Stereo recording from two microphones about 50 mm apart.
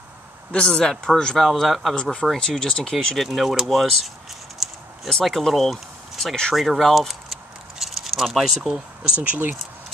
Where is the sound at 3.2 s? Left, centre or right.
Centre.